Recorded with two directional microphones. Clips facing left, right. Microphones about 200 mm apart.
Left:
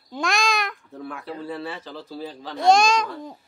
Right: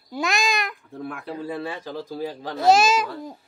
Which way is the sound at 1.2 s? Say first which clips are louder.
Right 1 dB; 15° right (ahead or behind).